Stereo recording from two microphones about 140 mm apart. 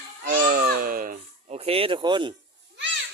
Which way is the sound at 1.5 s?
45° right (ahead or behind).